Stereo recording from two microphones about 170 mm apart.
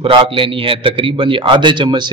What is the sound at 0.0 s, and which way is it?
Speech, 30° right (ahead or behind).